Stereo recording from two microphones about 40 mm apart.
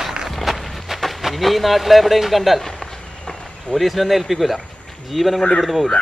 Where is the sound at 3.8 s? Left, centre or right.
Centre.